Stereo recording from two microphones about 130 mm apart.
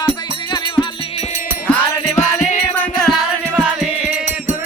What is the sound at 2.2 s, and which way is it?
Music, 60° left (ahead or behind).